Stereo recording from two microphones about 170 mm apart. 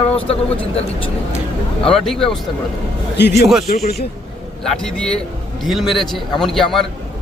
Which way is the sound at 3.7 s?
40° left (ahead or behind).